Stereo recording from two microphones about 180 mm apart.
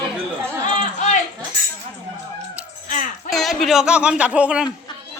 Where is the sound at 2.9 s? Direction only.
45° left (ahead or behind).